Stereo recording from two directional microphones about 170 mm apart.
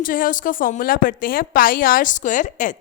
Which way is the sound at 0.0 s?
55° left (ahead or behind).